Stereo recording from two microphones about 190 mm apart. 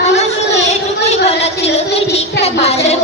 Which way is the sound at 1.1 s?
35° left (ahead or behind).